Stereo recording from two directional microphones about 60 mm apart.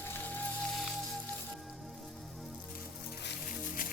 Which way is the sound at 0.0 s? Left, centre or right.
Left.